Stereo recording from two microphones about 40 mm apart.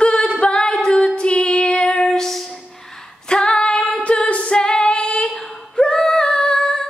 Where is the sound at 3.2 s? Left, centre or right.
Left.